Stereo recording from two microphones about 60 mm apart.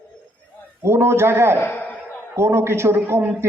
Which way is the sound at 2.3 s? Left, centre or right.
Right.